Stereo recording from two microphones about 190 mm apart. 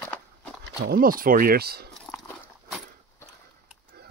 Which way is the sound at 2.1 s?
5° left (ahead or behind).